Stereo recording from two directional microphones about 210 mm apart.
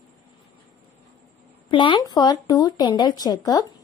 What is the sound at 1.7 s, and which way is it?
Speech, 25° left (ahead or behind).